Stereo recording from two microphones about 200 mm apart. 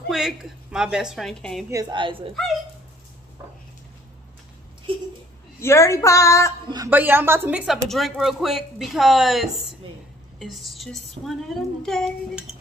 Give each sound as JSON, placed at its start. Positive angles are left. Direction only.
{"t": 0.1, "sound": "speech", "side_deg": 0}
{"t": 1.7, "sound": "a woman's voice", "side_deg": -20}
{"t": 5.6, "sound": "speech", "side_deg": 15}
{"t": 6.9, "sound": "speech", "side_deg": -10}